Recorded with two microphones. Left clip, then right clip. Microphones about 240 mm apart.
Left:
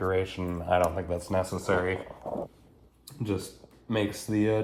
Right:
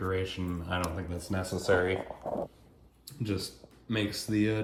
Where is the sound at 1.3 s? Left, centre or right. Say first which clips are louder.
Even; left.